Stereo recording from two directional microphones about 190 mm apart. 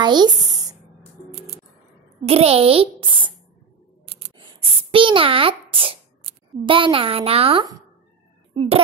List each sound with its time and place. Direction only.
0.0 s a sound: 20° right (ahead or behind)
2.2 s a child's voice: 30° right (ahead or behind)
4.1 s scissors: 30° right (ahead or behind)
6.6 s a child's voice: 25° right (ahead or behind)